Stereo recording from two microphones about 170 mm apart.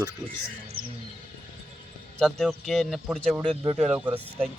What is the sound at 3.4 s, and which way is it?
Speech, 30° right (ahead or behind).